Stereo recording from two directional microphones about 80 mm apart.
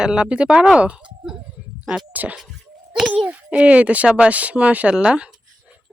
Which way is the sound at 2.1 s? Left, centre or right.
Centre.